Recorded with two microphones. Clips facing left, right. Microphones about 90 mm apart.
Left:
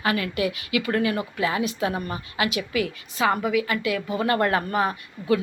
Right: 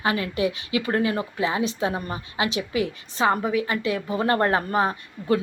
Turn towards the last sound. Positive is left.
turn(degrees=-30)  # may be behind; listen again after turning